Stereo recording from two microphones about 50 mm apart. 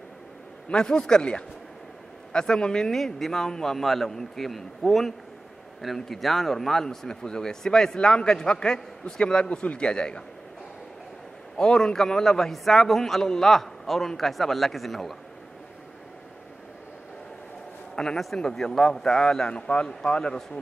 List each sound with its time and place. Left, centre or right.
0.7 s speech: centre
11.5 s a man's voice: centre
17.9 s a man's voice: centre